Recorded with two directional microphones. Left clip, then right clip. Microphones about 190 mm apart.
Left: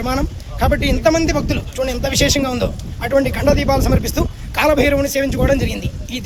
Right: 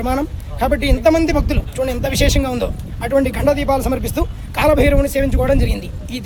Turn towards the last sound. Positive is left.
turn(degrees=0)  # may be behind; listen again after turning